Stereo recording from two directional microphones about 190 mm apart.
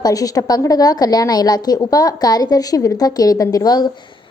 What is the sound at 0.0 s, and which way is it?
A woman's voice, 20° left (ahead or behind).